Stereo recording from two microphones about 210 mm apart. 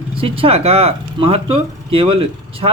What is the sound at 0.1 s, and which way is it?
Speech, 25° right (ahead or behind).